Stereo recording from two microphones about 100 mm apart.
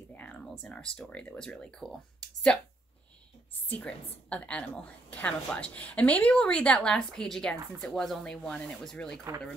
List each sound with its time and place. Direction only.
0.1 s speech: 15° left (ahead or behind)
3.6 s a woman's voice: 15° left (ahead or behind)